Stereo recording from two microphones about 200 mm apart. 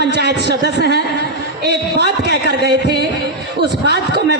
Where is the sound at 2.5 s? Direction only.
55° right (ahead or behind).